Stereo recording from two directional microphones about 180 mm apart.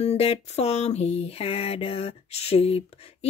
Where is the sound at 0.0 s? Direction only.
35° left (ahead or behind).